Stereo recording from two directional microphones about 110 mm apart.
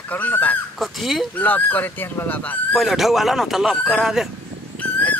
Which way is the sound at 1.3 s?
15° left (ahead or behind).